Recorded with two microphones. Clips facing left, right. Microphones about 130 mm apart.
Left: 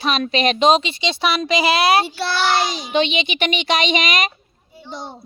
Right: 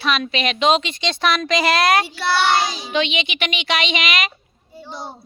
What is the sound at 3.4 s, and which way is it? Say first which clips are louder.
Speech: left 4 dB; 45° left (ahead or behind).